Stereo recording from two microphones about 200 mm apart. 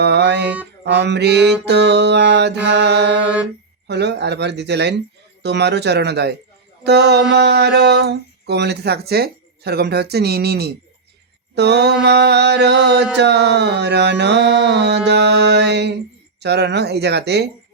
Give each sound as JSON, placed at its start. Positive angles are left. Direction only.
{"t": 0.0, "sound": "mantra", "side_deg": -55}
{"t": 0.9, "sound": "speech", "side_deg": -60}